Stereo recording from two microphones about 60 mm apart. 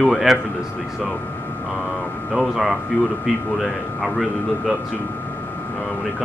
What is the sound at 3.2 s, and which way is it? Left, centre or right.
Speech, centre.